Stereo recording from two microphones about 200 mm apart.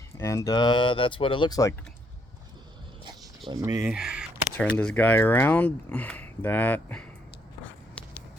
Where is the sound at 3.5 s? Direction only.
15° right (ahead or behind).